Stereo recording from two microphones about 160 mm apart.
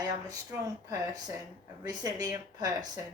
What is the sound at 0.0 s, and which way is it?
A woman's voice, 25° right (ahead or behind).